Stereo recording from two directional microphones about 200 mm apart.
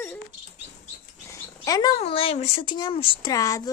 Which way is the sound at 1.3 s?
20° left (ahead or behind).